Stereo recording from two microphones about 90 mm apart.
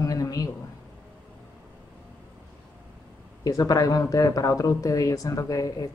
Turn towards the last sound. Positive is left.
turn(degrees=40)  # may be behind; listen again after turning